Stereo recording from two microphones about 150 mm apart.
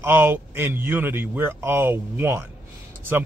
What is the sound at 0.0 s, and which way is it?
Speech, 15° right (ahead or behind).